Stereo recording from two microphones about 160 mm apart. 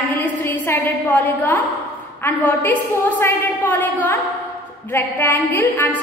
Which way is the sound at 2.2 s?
15° left (ahead or behind).